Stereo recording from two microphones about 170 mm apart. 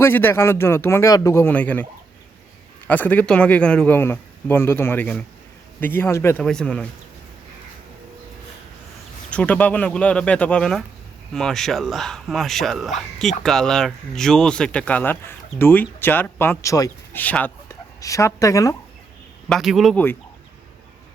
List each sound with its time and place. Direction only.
0.0 s speech: 10° left (ahead or behind)
6.4 s speech: 5° left (ahead or behind)
9.3 s speech: 10° left (ahead or behind)
19.5 s speech: centre (ahead or behind)